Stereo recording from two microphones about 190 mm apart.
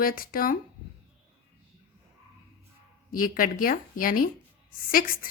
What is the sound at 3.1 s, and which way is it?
A woman's voice, 45° left (ahead or behind).